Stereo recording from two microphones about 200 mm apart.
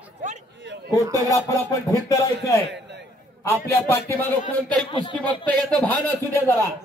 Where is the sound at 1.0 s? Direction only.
15° right (ahead or behind).